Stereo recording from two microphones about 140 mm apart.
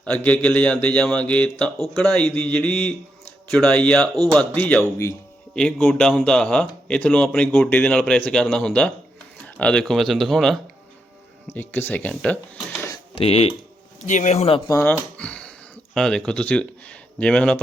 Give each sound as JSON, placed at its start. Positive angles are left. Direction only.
{"t": 0.0, "sound": "speech", "side_deg": 10}
{"t": 5.5, "sound": "speech", "side_deg": 5}
{"t": 11.5, "sound": "speech", "side_deg": 15}
{"t": 13.1, "sound": "speech", "side_deg": 45}
{"t": 14.1, "sound": "speech", "side_deg": 60}
{"t": 15.2, "sound": "a sound", "side_deg": 10}
{"t": 16.0, "sound": "speech", "side_deg": 5}